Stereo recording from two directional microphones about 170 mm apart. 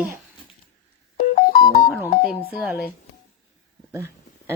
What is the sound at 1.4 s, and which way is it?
Music, 60° left (ahead or behind).